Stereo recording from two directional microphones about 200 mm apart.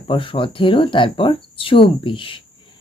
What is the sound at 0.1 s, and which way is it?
Speech, 25° left (ahead or behind).